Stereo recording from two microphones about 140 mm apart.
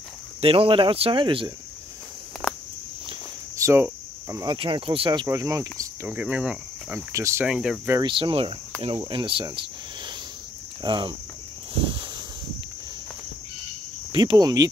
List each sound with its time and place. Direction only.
0.4 s speech: 40° right (ahead or behind)
2.4 s cricket: 10° left (ahead or behind)
3.5 s cricket: 20° right (ahead or behind)
4.6 s speech: 40° right (ahead or behind)
6.0 s speech: 10° right (ahead or behind)
7.1 s speech: 20° right (ahead or behind)
7.4 s speech: 5° right (ahead or behind)
8.0 s speech: 40° right (ahead or behind)
10.8 s speech: 35° right (ahead or behind)
11.7 s a sound: 40° right (ahead or behind)
14.1 s speech: 30° right (ahead or behind)